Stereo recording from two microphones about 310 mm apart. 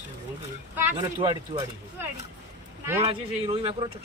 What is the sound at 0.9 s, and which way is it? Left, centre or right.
Speech, centre.